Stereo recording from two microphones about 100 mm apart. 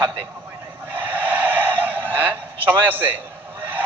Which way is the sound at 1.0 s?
15° right (ahead or behind).